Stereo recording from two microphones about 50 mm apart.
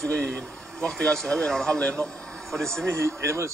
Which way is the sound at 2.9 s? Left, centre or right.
Right.